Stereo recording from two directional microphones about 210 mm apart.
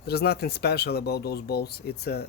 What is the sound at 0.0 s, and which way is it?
Speech, 50° left (ahead or behind).